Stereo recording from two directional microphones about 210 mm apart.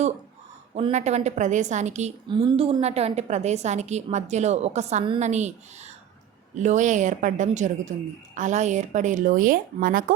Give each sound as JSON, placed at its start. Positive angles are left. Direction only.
{"t": 0.8, "sound": "a woman's voice", "side_deg": -30}
{"t": 2.3, "sound": "a woman's voice", "side_deg": -25}
{"t": 6.6, "sound": "a woman's voice", "side_deg": -35}